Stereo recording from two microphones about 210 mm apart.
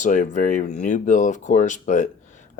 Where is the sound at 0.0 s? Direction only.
35° left (ahead or behind).